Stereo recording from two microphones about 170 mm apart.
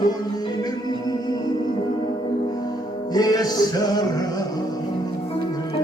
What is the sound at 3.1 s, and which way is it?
Music, 20° left (ahead or behind).